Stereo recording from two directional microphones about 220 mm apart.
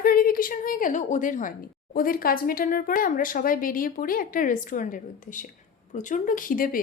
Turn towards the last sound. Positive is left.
turn(degrees=40)  # may be behind; listen again after turning